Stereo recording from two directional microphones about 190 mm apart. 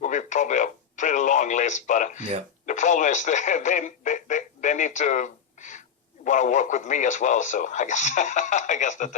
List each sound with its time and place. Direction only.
0.0 s speech: 40° left (ahead or behind)